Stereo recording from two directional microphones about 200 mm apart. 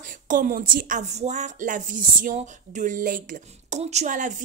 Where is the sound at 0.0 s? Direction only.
40° right (ahead or behind).